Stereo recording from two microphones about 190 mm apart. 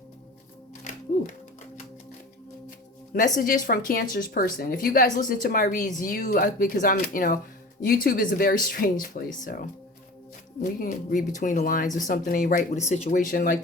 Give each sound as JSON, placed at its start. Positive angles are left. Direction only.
{"t": 2.6, "sound": "music", "side_deg": 45}
{"t": 3.3, "sound": "speech", "side_deg": 45}